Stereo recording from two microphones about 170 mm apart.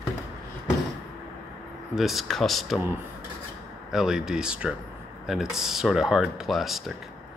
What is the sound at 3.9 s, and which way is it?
Speech, 5° right (ahead or behind).